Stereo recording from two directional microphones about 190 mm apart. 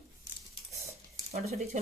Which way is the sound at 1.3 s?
35° right (ahead or behind).